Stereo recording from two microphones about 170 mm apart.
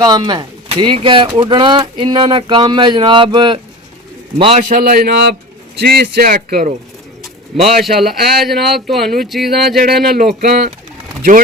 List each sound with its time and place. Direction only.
0.0 s a man's voice: 25° right (ahead or behind)
4.7 s speech: 60° right (ahead or behind)
7.8 s speech: centre (ahead or behind)
10.1 s speech: 60° right (ahead or behind)